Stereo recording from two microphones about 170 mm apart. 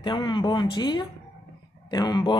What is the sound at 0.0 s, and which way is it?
Speech, 30° left (ahead or behind).